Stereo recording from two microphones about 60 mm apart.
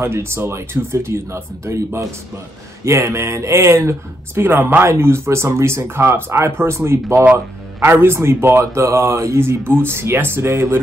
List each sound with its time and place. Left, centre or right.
0.0 s speech: right
4.4 s speech: right